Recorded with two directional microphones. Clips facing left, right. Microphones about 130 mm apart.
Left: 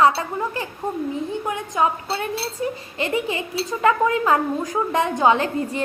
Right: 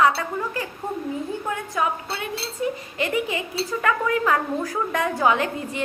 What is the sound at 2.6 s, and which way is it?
A woman's voice, 35° left (ahead or behind).